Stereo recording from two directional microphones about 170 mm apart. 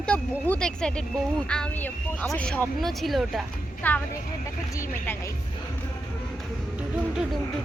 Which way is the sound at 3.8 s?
10° left (ahead or behind).